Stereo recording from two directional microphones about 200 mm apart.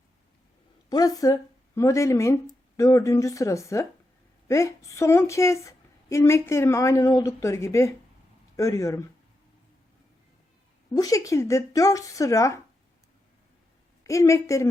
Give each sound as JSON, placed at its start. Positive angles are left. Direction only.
{"t": 0.9, "sound": "speech", "side_deg": 20}
{"t": 10.9, "sound": "speech", "side_deg": 20}
{"t": 14.0, "sound": "speech", "side_deg": 15}